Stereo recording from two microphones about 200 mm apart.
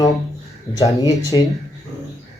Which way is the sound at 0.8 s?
20° left (ahead or behind).